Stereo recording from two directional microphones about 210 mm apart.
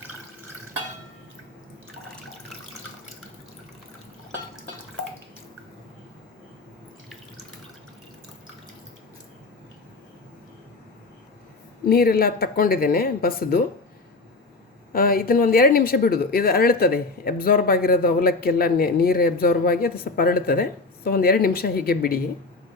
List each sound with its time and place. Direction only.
11.9 s speech: 45° left (ahead or behind)
14.9 s speech: 45° left (ahead or behind)